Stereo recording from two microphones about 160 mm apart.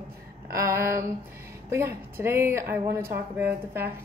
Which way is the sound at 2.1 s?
15° right (ahead or behind).